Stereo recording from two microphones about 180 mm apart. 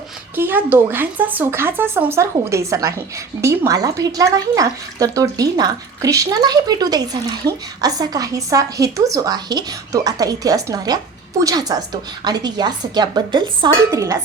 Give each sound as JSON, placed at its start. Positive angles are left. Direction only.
{"t": 0.3, "sound": "a woman's voice", "side_deg": -10}